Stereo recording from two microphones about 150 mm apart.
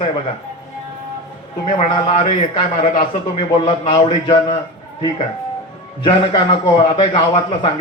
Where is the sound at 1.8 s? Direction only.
40° left (ahead or behind).